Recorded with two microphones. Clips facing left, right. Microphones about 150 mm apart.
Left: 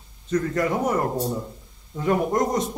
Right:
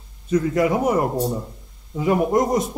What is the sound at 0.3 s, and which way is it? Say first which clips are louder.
Speech: right 4 dB; 10° right (ahead or behind).